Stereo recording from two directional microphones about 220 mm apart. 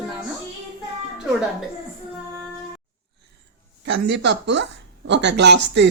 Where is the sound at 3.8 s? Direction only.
55° right (ahead or behind).